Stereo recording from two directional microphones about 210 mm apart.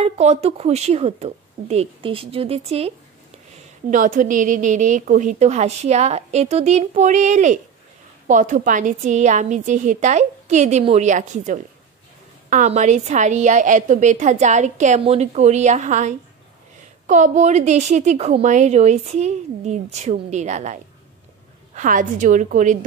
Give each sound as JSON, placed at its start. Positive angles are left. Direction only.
{"t": 0.0, "sound": "speech", "side_deg": -30}
{"t": 3.9, "sound": "a woman's voice", "side_deg": -40}